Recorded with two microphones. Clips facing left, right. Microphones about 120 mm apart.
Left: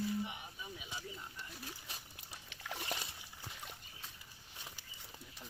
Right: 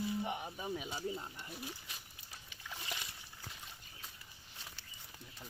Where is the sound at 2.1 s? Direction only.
70° left (ahead or behind).